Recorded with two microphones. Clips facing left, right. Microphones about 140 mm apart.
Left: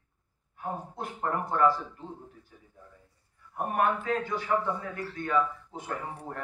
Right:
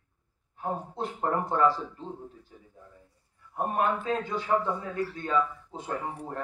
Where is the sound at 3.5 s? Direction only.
25° right (ahead or behind).